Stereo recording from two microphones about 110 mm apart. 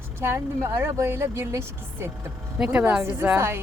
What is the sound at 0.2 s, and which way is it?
A woman's voice, 25° right (ahead or behind).